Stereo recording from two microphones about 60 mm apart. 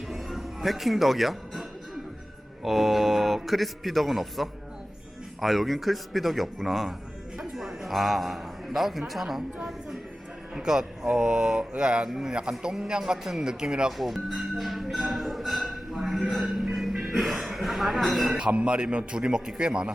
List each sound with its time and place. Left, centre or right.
0.1 s music: centre
2.6 s a man's voice: centre
10.5 s a man's voice: centre
13.9 s music: centre
17.1 s speech: centre
18.3 s a man's voice: centre